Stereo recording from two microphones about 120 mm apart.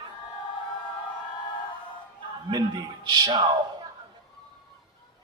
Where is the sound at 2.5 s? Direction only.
40° right (ahead or behind).